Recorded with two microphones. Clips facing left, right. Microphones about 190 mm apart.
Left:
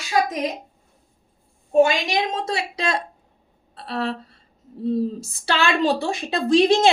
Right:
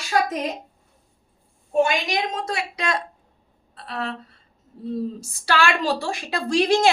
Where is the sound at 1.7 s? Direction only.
25° left (ahead or behind).